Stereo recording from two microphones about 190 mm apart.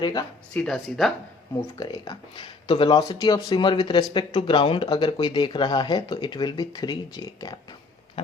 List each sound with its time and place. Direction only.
0.0 s speech: 20° left (ahead or behind)
0.5 s speech: 5° left (ahead or behind)
1.6 s speech: 20° left (ahead or behind)